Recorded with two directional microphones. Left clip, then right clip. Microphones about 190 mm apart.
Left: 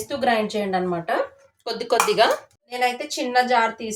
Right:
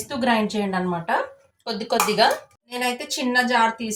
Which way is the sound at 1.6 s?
20° left (ahead or behind).